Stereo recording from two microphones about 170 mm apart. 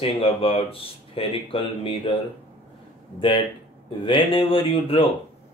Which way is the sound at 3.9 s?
30° left (ahead or behind).